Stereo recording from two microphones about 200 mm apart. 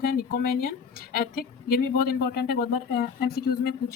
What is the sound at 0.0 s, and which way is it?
Speech, 45° left (ahead or behind).